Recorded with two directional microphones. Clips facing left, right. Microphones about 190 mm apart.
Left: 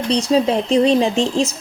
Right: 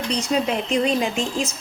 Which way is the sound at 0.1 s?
30° left (ahead or behind).